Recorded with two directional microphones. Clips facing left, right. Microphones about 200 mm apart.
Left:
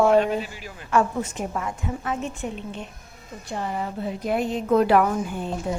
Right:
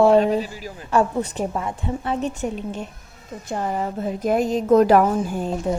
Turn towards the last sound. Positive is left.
turn(degrees=-40)  # may be behind; listen again after turning